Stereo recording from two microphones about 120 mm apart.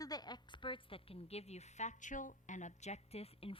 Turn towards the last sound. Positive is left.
turn(degrees=55)  # may be behind; listen again after turning